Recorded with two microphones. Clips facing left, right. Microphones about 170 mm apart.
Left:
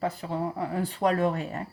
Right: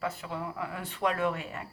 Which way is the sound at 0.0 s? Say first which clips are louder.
Left 5 dB; 35° left (ahead or behind).